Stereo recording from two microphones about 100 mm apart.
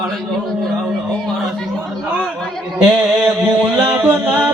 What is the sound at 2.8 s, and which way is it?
Mantra, 5° right (ahead or behind).